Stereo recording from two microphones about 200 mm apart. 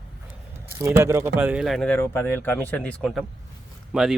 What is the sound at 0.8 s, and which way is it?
Speech, 15° right (ahead or behind).